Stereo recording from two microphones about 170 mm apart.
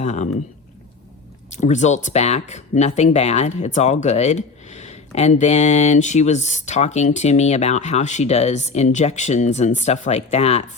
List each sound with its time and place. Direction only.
0.0 s speech: 40° left (ahead or behind)
1.5 s speech: 45° left (ahead or behind)